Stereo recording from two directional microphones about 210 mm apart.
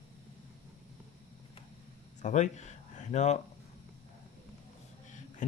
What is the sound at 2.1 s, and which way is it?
Speech, 35° left (ahead or behind).